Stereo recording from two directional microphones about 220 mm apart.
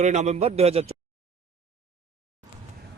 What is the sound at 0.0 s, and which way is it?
Speech, 30° right (ahead or behind).